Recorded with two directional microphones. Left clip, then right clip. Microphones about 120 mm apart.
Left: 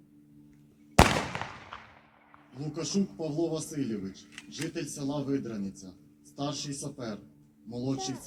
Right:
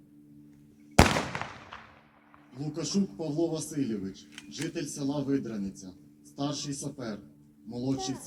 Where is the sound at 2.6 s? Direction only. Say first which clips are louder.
Even; 10° right (ahead or behind).